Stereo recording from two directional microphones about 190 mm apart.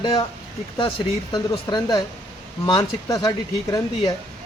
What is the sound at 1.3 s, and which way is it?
Speech, 25° left (ahead or behind).